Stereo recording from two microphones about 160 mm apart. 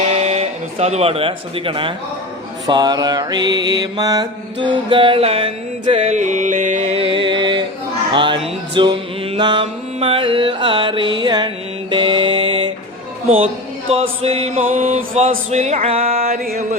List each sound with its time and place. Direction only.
0.1 s speech: 40° right (ahead or behind)
2.6 s mantra: 25° right (ahead or behind)
8.1 s music: 30° right (ahead or behind)
13.3 s speech: 35° right (ahead or behind)
14.7 s mantra: 40° right (ahead or behind)
16.3 s mantra: 70° right (ahead or behind)